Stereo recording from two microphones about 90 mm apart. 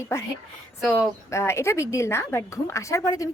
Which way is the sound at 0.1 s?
35° left (ahead or behind).